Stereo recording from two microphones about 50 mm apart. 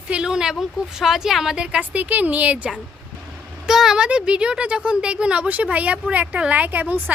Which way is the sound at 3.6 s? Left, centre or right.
Centre.